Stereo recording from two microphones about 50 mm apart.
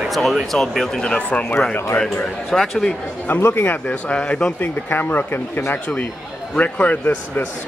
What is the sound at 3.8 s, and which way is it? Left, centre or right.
Speech, left.